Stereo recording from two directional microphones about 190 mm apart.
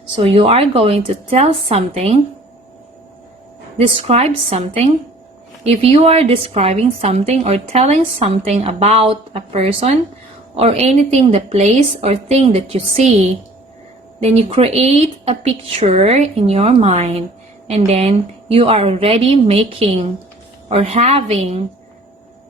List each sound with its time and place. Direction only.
0.2 s speech: 30° right (ahead or behind)
3.8 s speech: 30° right (ahead or behind)